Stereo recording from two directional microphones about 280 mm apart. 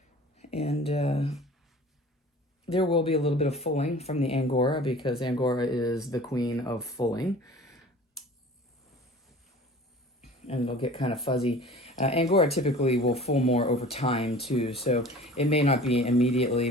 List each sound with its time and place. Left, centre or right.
0.3 s a sound: left
2.6 s speech: centre
10.2 s speech: left